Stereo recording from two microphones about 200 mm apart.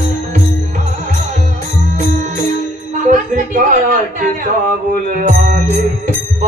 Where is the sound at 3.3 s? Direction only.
40° right (ahead or behind).